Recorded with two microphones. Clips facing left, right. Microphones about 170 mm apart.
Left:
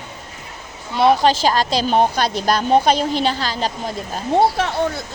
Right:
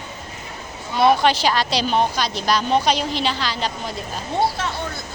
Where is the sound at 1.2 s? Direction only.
40° left (ahead or behind).